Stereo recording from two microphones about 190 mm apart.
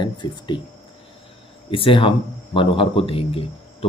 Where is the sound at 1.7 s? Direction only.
30° left (ahead or behind).